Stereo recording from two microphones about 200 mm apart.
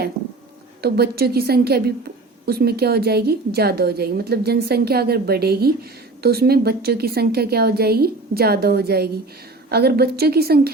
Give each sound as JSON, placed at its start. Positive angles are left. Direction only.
{"t": 0.8, "sound": "a woman's voice", "side_deg": -50}